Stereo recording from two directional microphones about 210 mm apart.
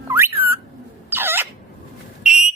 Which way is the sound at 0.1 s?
10° right (ahead or behind).